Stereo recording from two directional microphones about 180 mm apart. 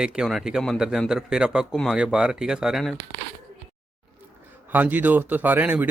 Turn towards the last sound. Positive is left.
turn(degrees=-10)  # may be behind; listen again after turning